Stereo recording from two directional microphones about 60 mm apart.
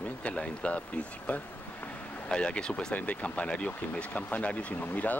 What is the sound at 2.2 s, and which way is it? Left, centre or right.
Speech, centre.